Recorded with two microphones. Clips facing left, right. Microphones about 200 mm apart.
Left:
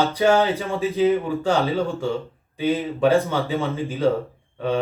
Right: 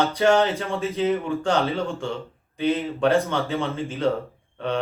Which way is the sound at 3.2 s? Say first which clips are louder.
Left 2 dB; centre (ahead or behind).